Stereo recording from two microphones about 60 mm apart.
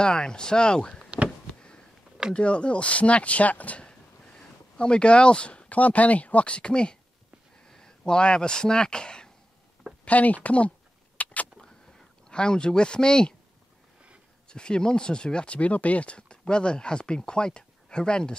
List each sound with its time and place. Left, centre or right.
0.0 s speech: centre
1.5 s a sound: centre
2.3 s speech: centre
10.0 s speech: left
11.2 s vehicle: left
12.3 s speech: centre
14.5 s speech: centre